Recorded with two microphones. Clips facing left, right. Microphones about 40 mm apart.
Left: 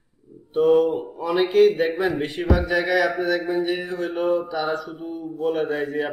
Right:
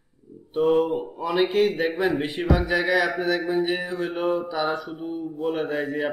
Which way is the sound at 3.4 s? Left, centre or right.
Centre.